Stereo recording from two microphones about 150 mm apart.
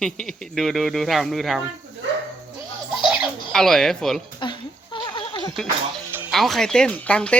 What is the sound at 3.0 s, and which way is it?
Speech, 5° right (ahead or behind).